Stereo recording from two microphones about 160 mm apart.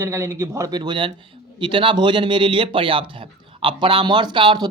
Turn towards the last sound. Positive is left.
turn(degrees=-30)  # may be behind; listen again after turning